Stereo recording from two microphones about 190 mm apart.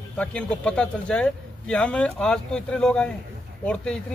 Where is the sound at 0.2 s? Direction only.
5° left (ahead or behind).